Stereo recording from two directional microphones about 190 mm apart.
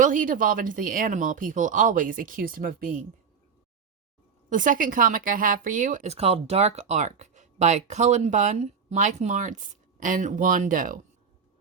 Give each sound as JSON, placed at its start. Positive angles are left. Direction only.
{"t": 0.0, "sound": "speech", "side_deg": -45}
{"t": 4.4, "sound": "speech", "side_deg": -45}